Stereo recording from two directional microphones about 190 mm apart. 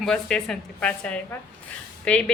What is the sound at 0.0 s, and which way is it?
A woman's voice, 5° left (ahead or behind).